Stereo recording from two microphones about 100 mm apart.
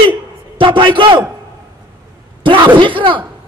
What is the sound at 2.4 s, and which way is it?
Speech, 55° right (ahead or behind).